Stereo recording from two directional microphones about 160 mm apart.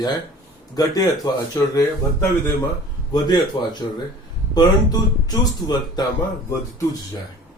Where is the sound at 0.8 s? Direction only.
25° left (ahead or behind).